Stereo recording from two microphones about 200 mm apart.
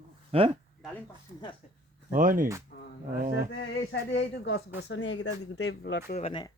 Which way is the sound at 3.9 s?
65° left (ahead or behind).